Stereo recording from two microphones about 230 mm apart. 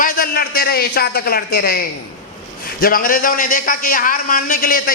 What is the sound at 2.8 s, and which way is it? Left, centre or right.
A man's voice, left.